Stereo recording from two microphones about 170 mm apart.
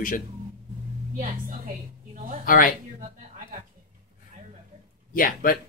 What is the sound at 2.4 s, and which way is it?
Speech, 55° left (ahead or behind).